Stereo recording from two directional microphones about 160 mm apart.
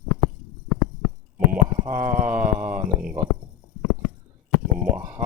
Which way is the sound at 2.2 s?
10° right (ahead or behind).